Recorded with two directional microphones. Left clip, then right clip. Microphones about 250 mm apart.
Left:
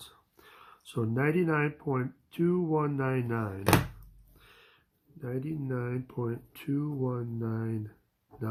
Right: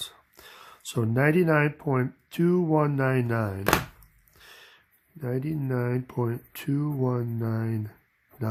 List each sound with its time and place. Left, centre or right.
0.3 s speech: right
4.4 s gasp: right
5.2 s speech: right